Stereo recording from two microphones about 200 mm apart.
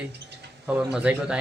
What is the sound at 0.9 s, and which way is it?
Speech, 5° right (ahead or behind).